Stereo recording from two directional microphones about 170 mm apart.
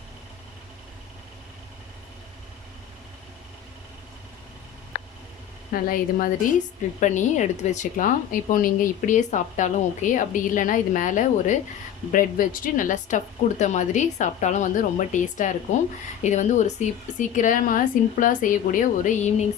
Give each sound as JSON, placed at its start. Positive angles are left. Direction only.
{"t": 5.7, "sound": "a woman's voice", "side_deg": 55}
{"t": 7.0, "sound": "a woman's voice", "side_deg": 45}